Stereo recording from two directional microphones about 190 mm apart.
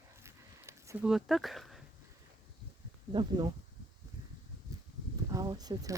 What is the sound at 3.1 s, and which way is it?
Speech, 25° right (ahead or behind).